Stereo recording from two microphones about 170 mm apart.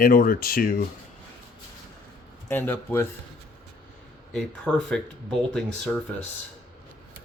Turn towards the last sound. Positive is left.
turn(degrees=5)  # may be behind; listen again after turning